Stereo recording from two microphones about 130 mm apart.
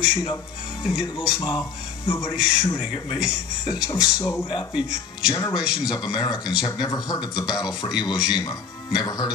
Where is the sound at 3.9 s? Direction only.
25° left (ahead or behind).